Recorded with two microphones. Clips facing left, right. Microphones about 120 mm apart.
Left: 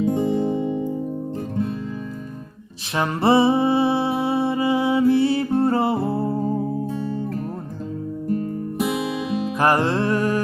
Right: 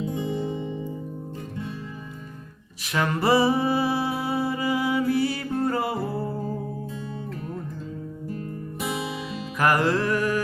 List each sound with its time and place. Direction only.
0.0 s music: 50° left (ahead or behind)
2.9 s music: 25° left (ahead or behind)
9.6 s music: 30° left (ahead or behind)